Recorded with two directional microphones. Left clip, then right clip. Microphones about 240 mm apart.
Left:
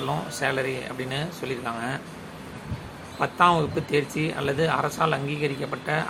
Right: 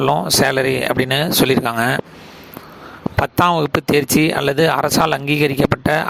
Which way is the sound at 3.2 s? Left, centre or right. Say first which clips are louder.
Right 4 dB; right.